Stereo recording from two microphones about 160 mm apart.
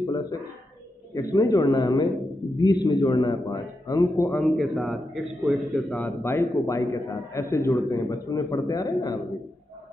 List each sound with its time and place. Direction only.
0.0 s a sound: 25° left (ahead or behind)
1.1 s a man's voice: 25° left (ahead or behind)
4.3 s a man's voice: centre (ahead or behind)
5.9 s a man's voice: 15° left (ahead or behind)
6.5 s a man's voice: 25° left (ahead or behind)